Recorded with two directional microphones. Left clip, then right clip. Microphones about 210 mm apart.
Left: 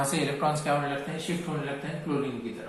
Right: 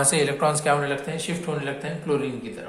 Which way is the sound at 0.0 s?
40° right (ahead or behind).